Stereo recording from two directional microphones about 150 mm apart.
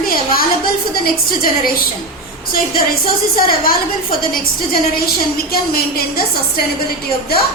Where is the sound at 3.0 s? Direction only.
75° left (ahead or behind).